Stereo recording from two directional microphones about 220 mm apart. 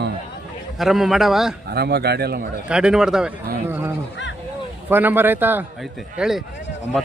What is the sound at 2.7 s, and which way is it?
A man's voice, 5° right (ahead or behind).